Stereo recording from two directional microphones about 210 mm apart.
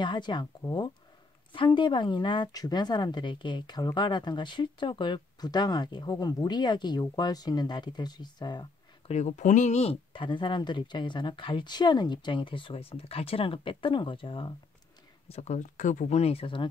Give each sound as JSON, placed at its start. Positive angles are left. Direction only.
{"t": 0.0, "sound": "speech", "side_deg": 20}
{"t": 9.1, "sound": "speech", "side_deg": 35}